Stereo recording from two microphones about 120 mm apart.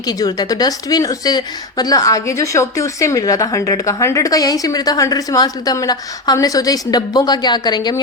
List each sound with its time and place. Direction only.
0.1 s a woman's voice: 30° left (ahead or behind)